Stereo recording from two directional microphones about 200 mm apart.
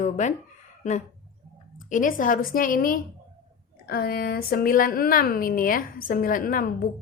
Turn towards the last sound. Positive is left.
turn(degrees=45)  # may be behind; listen again after turning